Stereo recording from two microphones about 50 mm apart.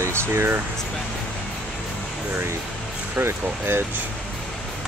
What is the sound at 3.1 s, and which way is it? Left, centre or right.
Speech, right.